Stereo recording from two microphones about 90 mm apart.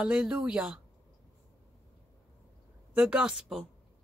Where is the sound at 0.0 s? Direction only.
10° right (ahead or behind).